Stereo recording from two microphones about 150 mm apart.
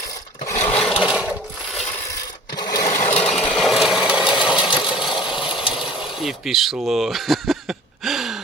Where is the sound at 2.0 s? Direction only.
25° left (ahead or behind).